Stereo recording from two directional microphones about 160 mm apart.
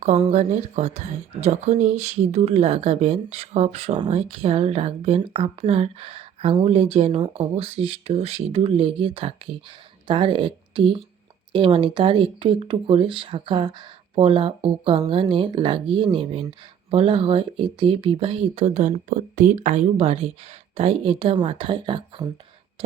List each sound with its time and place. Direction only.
0.0 s speech: 40° right (ahead or behind)